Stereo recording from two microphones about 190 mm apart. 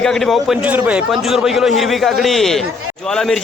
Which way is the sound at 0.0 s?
Centre (ahead or behind).